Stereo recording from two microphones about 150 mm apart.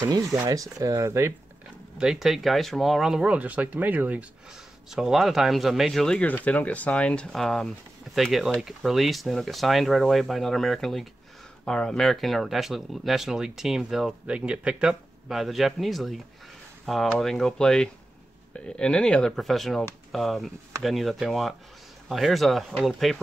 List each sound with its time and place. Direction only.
0.0 s speech: 25° right (ahead or behind)
2.0 s speech: 5° right (ahead or behind)